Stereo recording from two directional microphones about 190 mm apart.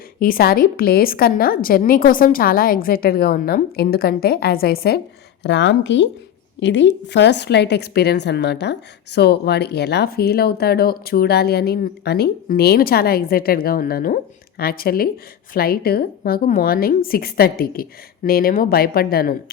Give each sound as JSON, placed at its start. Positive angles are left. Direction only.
{"t": 0.2, "sound": "a woman's voice", "side_deg": 50}
{"t": 5.4, "sound": "a woman's voice", "side_deg": 70}